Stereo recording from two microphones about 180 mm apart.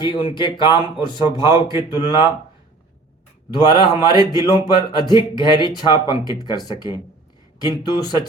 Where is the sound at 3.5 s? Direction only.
25° left (ahead or behind).